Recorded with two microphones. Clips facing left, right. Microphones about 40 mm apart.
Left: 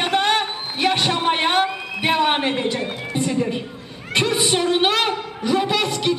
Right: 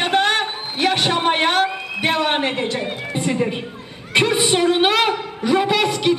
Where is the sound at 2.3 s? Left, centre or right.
Centre.